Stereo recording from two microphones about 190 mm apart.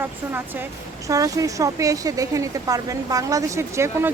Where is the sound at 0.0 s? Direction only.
10° right (ahead or behind).